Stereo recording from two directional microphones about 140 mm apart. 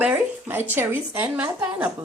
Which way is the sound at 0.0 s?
15° right (ahead or behind).